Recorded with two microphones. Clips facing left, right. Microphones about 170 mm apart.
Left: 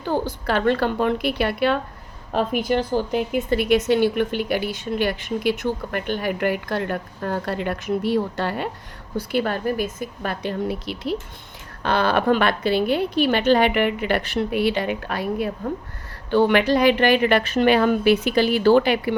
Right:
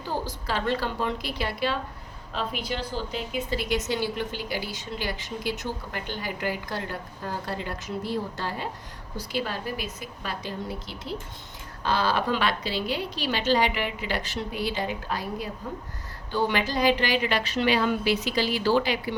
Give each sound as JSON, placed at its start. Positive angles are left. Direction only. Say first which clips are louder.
{"t": 0.0, "sound": "speech", "louder": "left 8 dB", "side_deg": 60}